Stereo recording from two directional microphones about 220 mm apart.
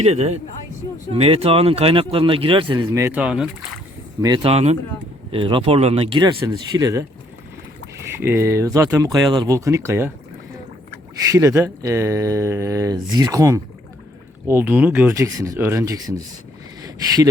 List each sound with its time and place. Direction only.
0.0 s speech: 30° right (ahead or behind); by 3.5 s 5° right (ahead or behind)
4.2 s speech: 20° right (ahead or behind)
11.3 s speech: 15° right (ahead or behind)